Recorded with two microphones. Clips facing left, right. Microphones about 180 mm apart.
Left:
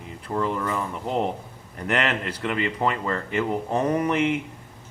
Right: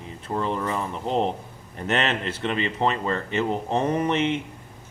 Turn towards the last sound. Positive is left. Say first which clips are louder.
# left 1 dB
turn(degrees=-25)  # may be behind; listen again after turning